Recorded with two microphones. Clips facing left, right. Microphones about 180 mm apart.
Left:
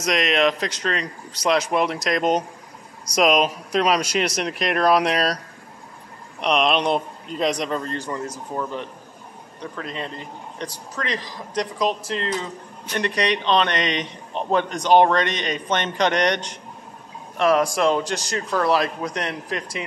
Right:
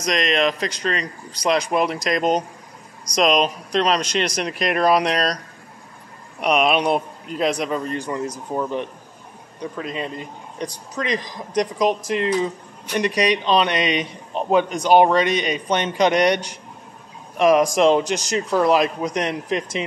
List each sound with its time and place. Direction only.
0.0 s speech: 5° left (ahead or behind)
6.4 s a man's voice: 5° right (ahead or behind)